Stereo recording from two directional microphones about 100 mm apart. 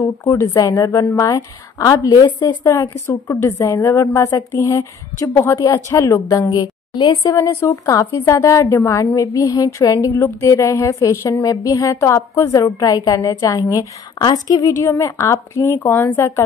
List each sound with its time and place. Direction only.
0.0 s a woman's voice: 35° left (ahead or behind); by 2.5 s 50° left (ahead or behind)
2.6 s a woman's voice: 30° left (ahead or behind)
6.5 s a woman's voice: 50° left (ahead or behind)
7.3 s a woman's voice: 30° left (ahead or behind)
12.6 s a woman's voice: 40° left (ahead or behind); by 16.4 s 20° left (ahead or behind)